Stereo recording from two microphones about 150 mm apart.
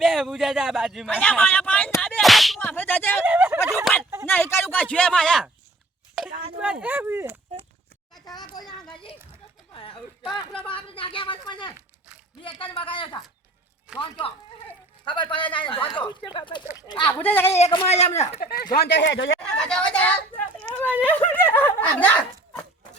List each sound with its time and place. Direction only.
0.0 s a man's voice: centre (ahead or behind)
2.0 s whip: 5° left (ahead or behind)
2.6 s speech: 15° left (ahead or behind)
3.2 s speech: 15° right (ahead or behind)
3.9 s speech: centre (ahead or behind)
4.3 s speech: 15° left (ahead or behind)
6.6 s speech: 10° right (ahead or behind)
8.6 s a man's voice: centre (ahead or behind)
9.7 s a woman's voice: 35° left (ahead or behind)
17.1 s speech: 10° left (ahead or behind)
17.5 s a man's voice: 40° left (ahead or behind)
18.3 s speech: 85° left
19.4 s speech: 5° left (ahead or behind)